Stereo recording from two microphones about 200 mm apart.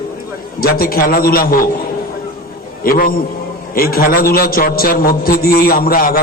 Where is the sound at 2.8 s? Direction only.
45° left (ahead or behind).